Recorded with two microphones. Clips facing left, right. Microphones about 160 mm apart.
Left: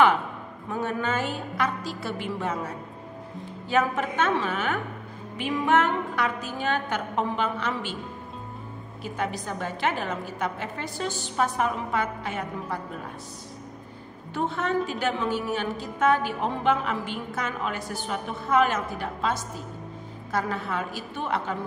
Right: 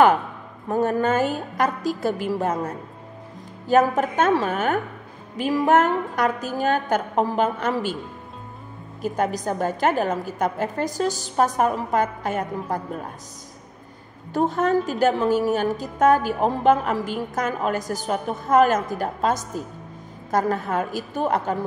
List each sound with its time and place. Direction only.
0.7 s a woman's voice: 40° right (ahead or behind)
9.0 s a woman's voice: 45° right (ahead or behind)
14.3 s a woman's voice: 40° right (ahead or behind)